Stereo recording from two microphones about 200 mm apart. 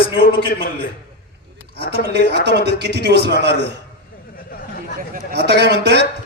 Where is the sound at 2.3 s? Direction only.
55° right (ahead or behind).